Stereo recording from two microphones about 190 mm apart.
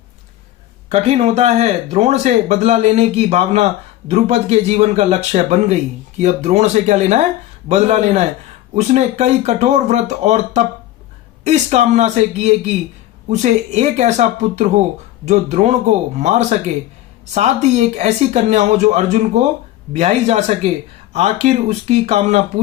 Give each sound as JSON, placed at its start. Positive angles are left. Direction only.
{"t": 0.9, "sound": "speech", "side_deg": -35}